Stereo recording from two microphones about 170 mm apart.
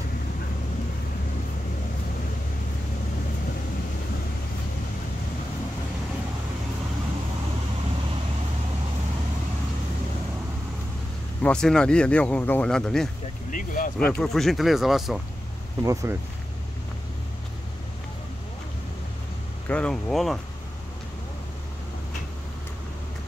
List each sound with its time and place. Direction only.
11.4 s speech: 5° left (ahead or behind)
13.5 s speech: 50° left (ahead or behind)
13.9 s speech: 5° left (ahead or behind)
15.8 s speech: 20° right (ahead or behind)
19.7 s speech: 5° left (ahead or behind)